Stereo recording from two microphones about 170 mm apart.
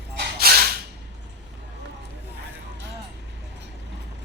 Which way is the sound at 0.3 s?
60° right (ahead or behind).